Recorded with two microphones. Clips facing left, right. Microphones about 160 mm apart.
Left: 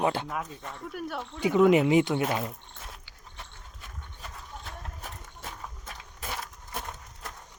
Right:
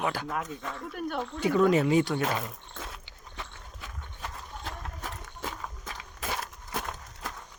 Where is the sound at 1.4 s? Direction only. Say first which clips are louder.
Left 3 dB; 20° left (ahead or behind).